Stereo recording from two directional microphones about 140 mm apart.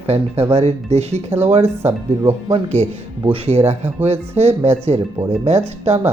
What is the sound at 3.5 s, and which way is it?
Speech, 45° right (ahead or behind).